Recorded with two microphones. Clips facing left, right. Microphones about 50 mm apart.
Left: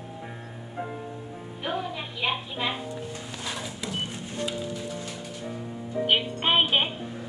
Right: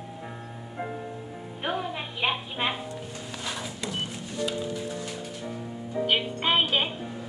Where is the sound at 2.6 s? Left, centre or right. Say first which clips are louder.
Right 2 dB; right.